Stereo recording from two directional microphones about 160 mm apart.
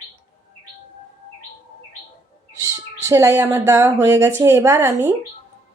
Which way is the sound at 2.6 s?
15° right (ahead or behind).